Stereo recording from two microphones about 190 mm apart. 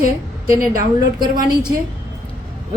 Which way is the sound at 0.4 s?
50° right (ahead or behind).